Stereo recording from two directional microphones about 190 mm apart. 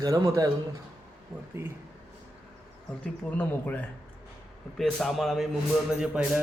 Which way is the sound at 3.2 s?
10° left (ahead or behind).